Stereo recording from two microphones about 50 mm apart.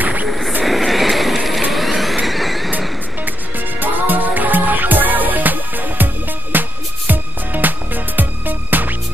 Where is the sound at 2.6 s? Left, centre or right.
Right.